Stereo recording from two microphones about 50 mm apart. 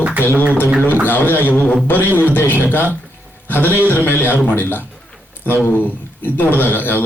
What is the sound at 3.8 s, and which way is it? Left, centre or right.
Speech, left.